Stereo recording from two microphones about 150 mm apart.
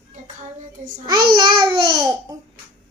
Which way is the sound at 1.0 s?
25° right (ahead or behind).